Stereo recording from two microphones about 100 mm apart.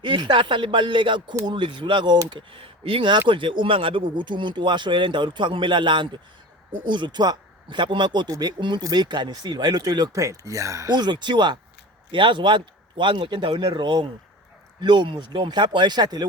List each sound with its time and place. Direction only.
0.0 s speech: 50° right (ahead or behind)